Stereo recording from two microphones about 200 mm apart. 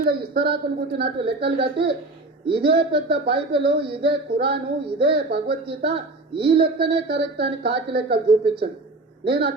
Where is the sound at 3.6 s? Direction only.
55° right (ahead or behind).